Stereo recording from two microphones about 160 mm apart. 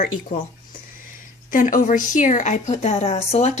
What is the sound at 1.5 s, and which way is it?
A woman's voice, 55° left (ahead or behind).